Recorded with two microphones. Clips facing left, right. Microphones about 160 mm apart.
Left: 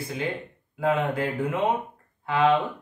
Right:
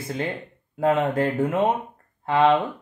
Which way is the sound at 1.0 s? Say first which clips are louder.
Right 4 dB; 45° right (ahead or behind).